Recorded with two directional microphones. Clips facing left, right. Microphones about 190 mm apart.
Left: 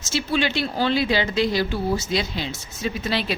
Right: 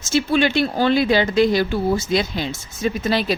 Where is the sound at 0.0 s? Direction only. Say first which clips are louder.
Right 5 dB; 50° right (ahead or behind).